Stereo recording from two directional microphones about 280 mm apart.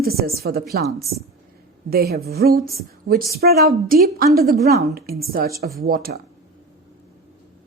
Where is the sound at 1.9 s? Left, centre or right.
Right.